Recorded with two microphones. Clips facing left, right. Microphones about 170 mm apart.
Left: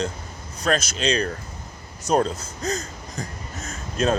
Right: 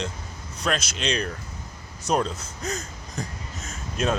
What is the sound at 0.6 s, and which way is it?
Speech, 45° left (ahead or behind).